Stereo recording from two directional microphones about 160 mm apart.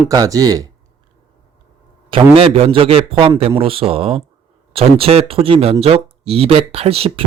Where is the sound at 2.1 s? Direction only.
35° right (ahead or behind).